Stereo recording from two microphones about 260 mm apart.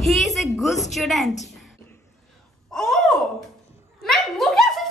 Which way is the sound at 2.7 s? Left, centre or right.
Centre.